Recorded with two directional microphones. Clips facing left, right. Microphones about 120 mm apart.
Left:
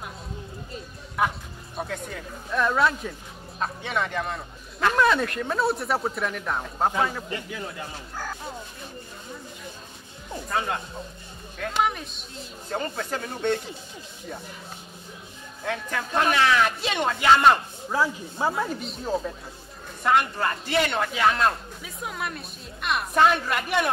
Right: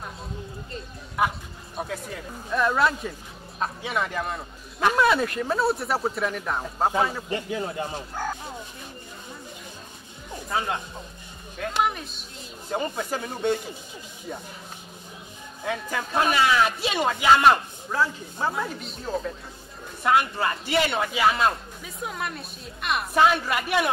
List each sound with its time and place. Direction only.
1.2 s speech: 5° right (ahead or behind)
7.2 s a man's voice: 25° right (ahead or behind)
11.5 s speech: 5° right (ahead or behind)
12.7 s speech: 10° right (ahead or behind)
15.6 s speech: 5° right (ahead or behind)
17.8 s snake: 10° left (ahead or behind)
18.5 s speech: centre (ahead or behind)
20.0 s speech: 5° right (ahead or behind)